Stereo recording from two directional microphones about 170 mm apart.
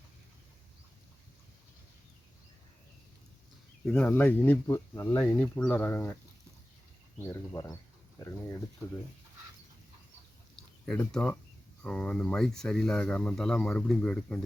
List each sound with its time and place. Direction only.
3.8 s speech: 10° left (ahead or behind)
7.3 s speech: 20° left (ahead or behind)
10.8 s speech: 5° left (ahead or behind)